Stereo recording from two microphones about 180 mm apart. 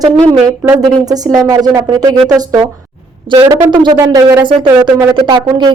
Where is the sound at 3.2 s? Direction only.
25° right (ahead or behind).